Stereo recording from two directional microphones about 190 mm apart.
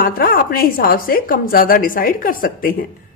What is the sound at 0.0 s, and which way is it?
A woman's voice, 50° left (ahead or behind).